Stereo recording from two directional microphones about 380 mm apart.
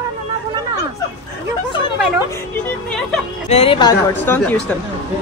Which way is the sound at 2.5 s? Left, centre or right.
Centre.